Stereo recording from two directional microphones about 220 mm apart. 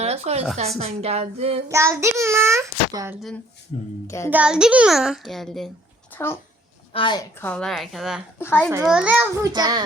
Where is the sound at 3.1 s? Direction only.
Centre (ahead or behind).